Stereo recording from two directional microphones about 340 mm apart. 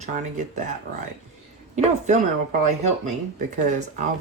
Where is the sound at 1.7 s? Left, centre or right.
Centre.